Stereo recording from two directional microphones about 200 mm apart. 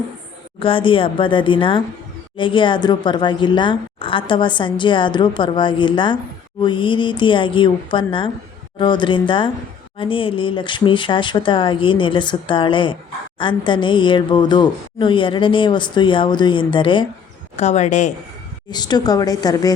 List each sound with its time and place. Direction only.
0.6 s a woman's voice: 25° left (ahead or behind)
17.6 s a woman's voice: 35° left (ahead or behind)
18.7 s a woman's voice: 20° left (ahead or behind)